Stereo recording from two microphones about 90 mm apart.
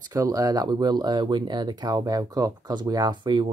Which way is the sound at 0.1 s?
40° right (ahead or behind).